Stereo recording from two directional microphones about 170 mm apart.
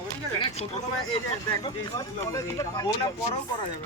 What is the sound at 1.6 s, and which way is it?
Speech, 20° left (ahead or behind).